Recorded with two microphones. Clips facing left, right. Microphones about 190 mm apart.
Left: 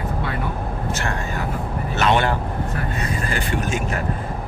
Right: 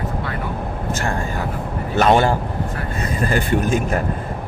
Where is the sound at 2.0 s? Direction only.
40° right (ahead or behind).